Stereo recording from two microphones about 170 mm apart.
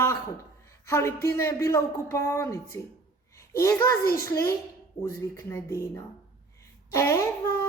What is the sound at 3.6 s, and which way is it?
Speech, 15° left (ahead or behind).